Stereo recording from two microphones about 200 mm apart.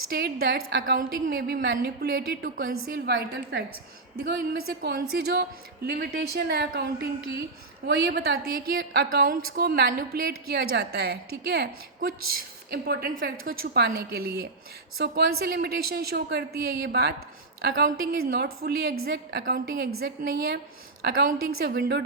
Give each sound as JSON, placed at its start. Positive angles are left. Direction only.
{"t": 0.1, "sound": "a woman's voice", "side_deg": -50}